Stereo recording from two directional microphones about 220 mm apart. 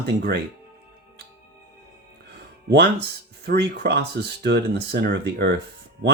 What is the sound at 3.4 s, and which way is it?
Speech, 50° right (ahead or behind).